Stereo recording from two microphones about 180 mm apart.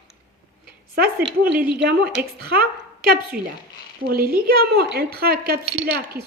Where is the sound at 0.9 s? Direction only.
55° right (ahead or behind).